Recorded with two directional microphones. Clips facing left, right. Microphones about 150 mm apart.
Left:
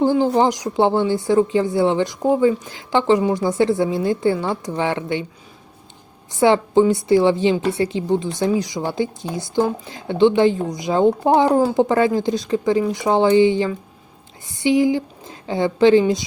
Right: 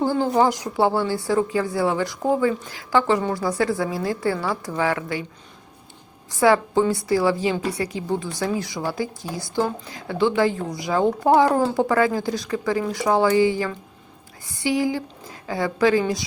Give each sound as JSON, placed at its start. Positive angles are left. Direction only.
{"t": 0.0, "sound": "a woman's voice", "side_deg": 15}
{"t": 6.3, "sound": "a woman's voice", "side_deg": 20}